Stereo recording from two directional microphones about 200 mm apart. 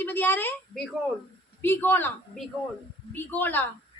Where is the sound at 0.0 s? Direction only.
10° left (ahead or behind).